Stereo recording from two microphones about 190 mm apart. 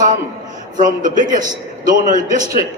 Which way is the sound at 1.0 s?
45° right (ahead or behind).